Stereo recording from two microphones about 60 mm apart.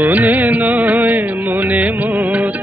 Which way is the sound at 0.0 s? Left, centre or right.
Right.